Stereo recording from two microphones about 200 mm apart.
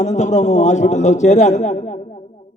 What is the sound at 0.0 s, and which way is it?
A man's voice, 35° left (ahead or behind).